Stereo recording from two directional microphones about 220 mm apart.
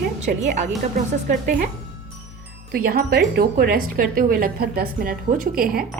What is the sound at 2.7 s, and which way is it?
A woman's voice, 45° right (ahead or behind).